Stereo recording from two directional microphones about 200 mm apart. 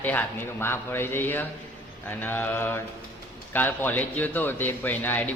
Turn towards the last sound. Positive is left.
turn(degrees=10)  # may be behind; listen again after turning